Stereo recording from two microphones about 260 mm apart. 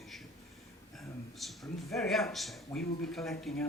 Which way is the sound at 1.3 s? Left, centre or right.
Centre.